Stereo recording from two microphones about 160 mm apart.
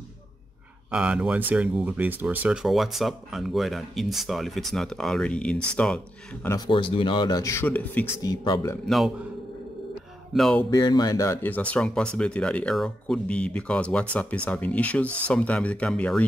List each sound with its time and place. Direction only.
0.9 s speech: 5° right (ahead or behind)
6.7 s speech: 30° left (ahead or behind); by 8.1 s 10° left (ahead or behind)
8.2 s speech: 25° left (ahead or behind)
8.8 s speech: centre (ahead or behind)
10.3 s speech: centre (ahead or behind)
10.7 s speech: 25° left (ahead or behind); by 16.3 s 5° left (ahead or behind)